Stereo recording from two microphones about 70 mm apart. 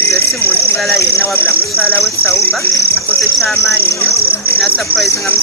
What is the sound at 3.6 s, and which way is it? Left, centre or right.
Speech, left.